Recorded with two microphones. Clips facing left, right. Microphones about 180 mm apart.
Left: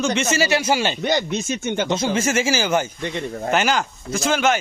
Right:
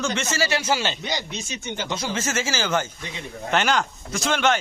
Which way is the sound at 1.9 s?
20° left (ahead or behind).